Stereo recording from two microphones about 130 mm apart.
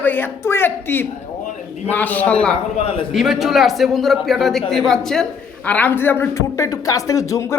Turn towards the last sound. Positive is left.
turn(degrees=25)  # may be behind; listen again after turning